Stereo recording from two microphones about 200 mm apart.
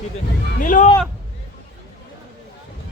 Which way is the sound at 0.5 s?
40° left (ahead or behind).